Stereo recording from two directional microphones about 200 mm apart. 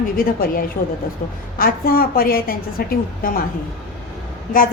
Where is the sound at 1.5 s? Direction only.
45° left (ahead or behind).